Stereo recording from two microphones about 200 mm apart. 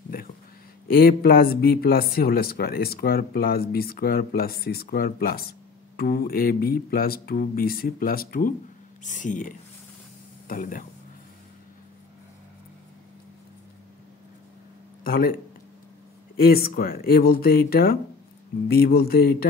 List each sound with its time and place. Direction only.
0.9 s speech: 50° left (ahead or behind)
10.5 s speech: 45° left (ahead or behind)
15.0 s speech: 45° left (ahead or behind)
16.3 s speech: 50° left (ahead or behind)